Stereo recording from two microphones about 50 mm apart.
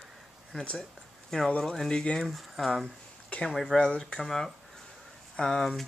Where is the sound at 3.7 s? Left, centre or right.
Centre.